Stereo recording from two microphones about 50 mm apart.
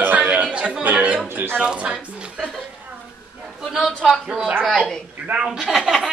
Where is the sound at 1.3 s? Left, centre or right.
Right.